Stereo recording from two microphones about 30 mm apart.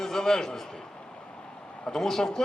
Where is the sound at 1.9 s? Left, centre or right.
Centre.